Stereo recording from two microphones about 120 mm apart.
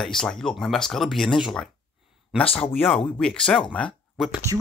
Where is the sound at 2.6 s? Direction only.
15° left (ahead or behind).